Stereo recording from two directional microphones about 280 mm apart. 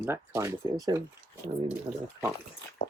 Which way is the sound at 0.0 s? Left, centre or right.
Centre.